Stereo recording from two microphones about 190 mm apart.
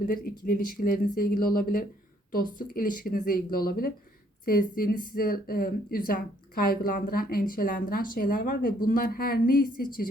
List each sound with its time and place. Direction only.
0.0 s speech: 50° left (ahead or behind)